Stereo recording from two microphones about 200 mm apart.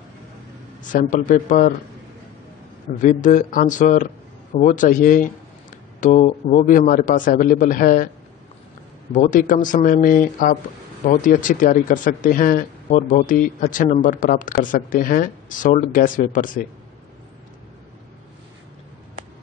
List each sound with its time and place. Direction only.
0.8 s a man's voice: 40° left (ahead or behind)
3.0 s a man's voice: 40° left (ahead or behind)
9.1 s a man's voice: 40° left (ahead or behind)